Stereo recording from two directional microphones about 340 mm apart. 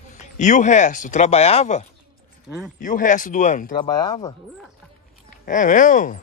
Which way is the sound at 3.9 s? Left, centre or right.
Centre.